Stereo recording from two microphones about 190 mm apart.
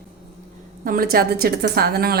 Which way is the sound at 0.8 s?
50° right (ahead or behind).